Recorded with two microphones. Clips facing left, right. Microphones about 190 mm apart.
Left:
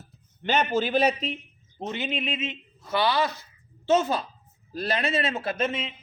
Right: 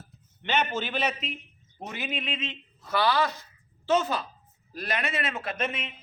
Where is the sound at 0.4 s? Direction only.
35° left (ahead or behind).